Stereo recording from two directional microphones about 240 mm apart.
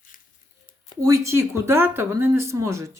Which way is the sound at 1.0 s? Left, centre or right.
Centre.